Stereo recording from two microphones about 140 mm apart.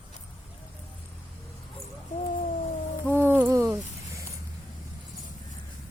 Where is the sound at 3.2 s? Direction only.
15° right (ahead or behind).